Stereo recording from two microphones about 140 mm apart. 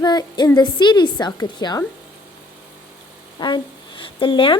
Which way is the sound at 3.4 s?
35° left (ahead or behind).